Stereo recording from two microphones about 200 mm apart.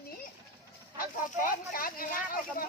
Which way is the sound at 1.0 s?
45° left (ahead or behind).